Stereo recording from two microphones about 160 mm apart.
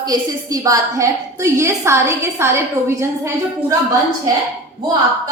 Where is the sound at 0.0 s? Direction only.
25° right (ahead or behind).